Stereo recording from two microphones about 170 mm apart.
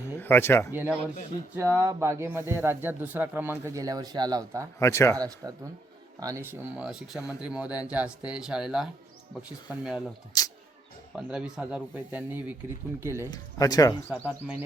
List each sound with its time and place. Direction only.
0.0 s a sound: 15° left (ahead or behind)
0.7 s speech: 10° right (ahead or behind)
4.8 s speech: 15° left (ahead or behind)
5.1 s a man's voice: 20° right (ahead or behind); by 10.0 s 5° right (ahead or behind)
10.3 s speech: 20° left (ahead or behind)
11.1 s speech: 5° right (ahead or behind)
13.3 s speech: 20° left (ahead or behind)
14.3 s speech: 10° right (ahead or behind)